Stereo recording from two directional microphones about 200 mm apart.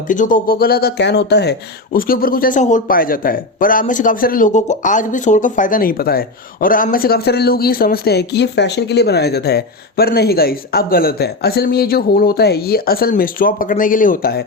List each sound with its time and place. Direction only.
0.1 s speech: 40° left (ahead or behind)